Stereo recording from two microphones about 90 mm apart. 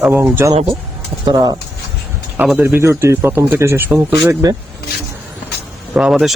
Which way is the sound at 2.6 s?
30° right (ahead or behind).